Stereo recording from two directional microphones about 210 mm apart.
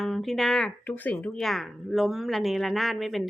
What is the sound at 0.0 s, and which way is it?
Speech, centre (ahead or behind).